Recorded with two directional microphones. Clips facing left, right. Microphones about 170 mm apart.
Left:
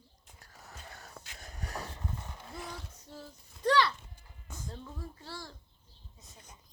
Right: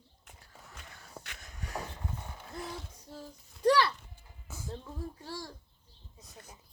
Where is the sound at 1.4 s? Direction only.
40° left (ahead or behind).